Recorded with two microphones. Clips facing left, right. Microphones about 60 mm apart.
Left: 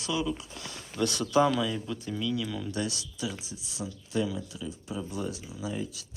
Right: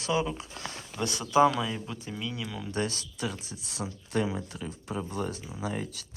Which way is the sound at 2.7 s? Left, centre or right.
Right.